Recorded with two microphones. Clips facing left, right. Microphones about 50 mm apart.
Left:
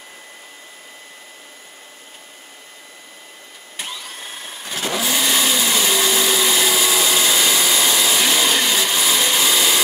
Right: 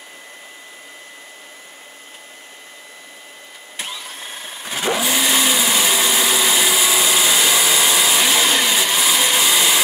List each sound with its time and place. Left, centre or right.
3.7 s vehicle: centre